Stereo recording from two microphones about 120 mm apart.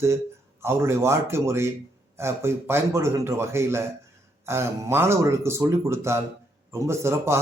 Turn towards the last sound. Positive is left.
turn(degrees=-20)  # may be behind; listen again after turning